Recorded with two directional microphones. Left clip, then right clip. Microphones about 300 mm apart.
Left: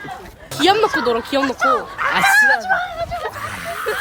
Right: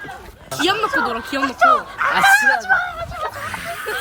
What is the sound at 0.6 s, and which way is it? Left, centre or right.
Speech, left.